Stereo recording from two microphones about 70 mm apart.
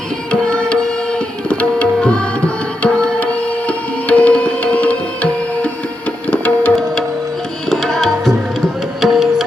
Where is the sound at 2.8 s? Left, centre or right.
Centre.